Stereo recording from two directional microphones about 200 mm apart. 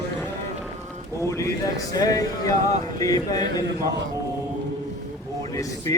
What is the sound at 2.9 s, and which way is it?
Speech, 20° left (ahead or behind).